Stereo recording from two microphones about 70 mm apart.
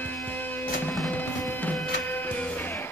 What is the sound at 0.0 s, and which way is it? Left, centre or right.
Music, left.